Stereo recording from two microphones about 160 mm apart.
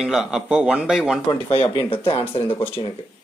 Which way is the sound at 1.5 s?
35° left (ahead or behind).